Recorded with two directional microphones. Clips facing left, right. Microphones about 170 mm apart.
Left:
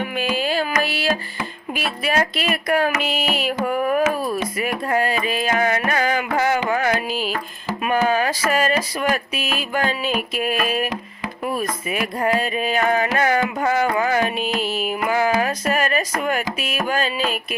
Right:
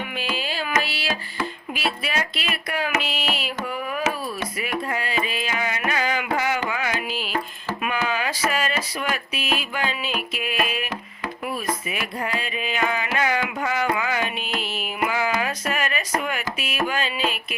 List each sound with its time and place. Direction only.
0.3 s carnatic music: 45° left (ahead or behind)
1.7 s speech: 45° left (ahead or behind)
5.8 s music: 45° left (ahead or behind)
6.7 s carnatic music: 45° left (ahead or behind)
7.9 s a sound: 45° left (ahead or behind)
10.2 s speech: 45° left (ahead or behind)
11.9 s speech: 45° left (ahead or behind)
13.1 s carnatic music: 45° left (ahead or behind)